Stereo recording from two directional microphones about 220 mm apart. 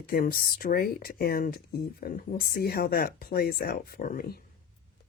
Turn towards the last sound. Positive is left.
turn(degrees=40)  # may be behind; listen again after turning